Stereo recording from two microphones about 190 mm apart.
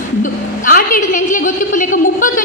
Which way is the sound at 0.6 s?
45° left (ahead or behind).